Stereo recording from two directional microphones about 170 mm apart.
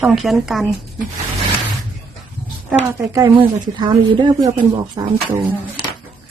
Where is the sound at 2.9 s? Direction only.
20° right (ahead or behind).